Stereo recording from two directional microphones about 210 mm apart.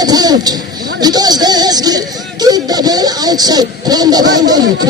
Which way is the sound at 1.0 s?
20° right (ahead or behind).